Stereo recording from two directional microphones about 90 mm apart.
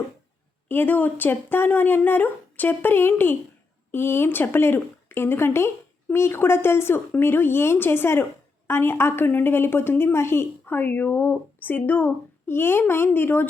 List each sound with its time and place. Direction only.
0.7 s speech: 20° left (ahead or behind)